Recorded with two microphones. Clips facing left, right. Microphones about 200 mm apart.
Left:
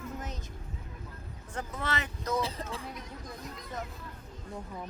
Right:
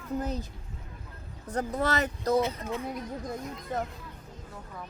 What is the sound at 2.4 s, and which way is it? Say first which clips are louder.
Speech: right 5 dB; 30° left (ahead or behind).